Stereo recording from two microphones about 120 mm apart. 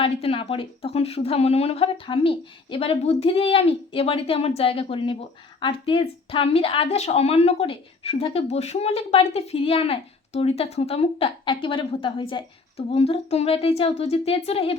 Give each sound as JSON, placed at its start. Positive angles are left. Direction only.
{"t": 0.0, "sound": "a woman's voice", "side_deg": 50}